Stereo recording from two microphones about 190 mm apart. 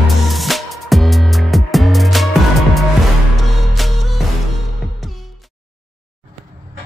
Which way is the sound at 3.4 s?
Centre (ahead or behind).